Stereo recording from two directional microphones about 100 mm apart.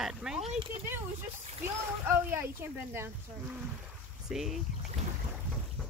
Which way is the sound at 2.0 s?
25° right (ahead or behind).